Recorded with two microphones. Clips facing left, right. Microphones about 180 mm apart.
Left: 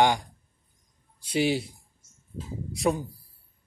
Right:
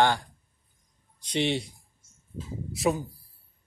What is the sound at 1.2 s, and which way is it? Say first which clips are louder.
Speech: left 2 dB; 5° left (ahead or behind).